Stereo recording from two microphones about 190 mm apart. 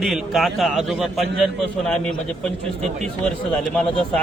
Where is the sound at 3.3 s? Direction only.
5° left (ahead or behind).